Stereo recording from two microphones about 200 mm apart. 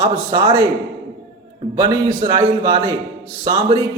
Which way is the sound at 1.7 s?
25° right (ahead or behind).